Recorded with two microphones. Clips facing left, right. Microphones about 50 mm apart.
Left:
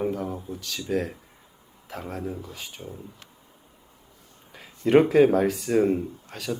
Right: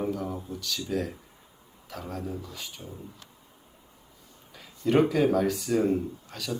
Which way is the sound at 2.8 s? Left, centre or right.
Centre.